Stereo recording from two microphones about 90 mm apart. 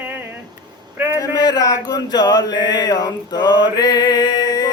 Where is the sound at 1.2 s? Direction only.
50° left (ahead or behind).